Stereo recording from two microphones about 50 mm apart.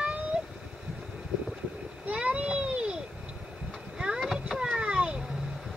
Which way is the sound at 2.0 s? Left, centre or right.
Right.